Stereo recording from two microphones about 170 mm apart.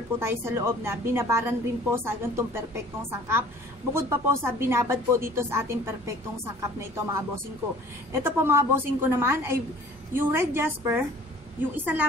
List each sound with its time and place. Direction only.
0.2 s a woman's voice: 15° right (ahead or behind)
8.1 s a woman's voice: 15° right (ahead or behind)